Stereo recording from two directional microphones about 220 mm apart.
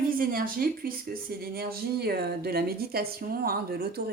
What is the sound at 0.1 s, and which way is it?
A woman's voice, 40° right (ahead or behind).